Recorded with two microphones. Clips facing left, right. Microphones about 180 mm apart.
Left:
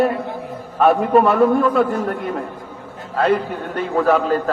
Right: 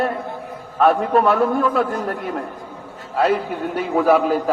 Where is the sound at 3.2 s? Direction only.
5° right (ahead or behind).